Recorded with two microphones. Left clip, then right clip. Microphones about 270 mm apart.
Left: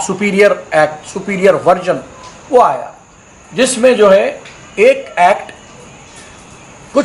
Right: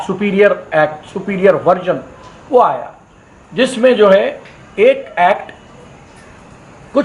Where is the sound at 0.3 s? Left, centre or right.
Centre.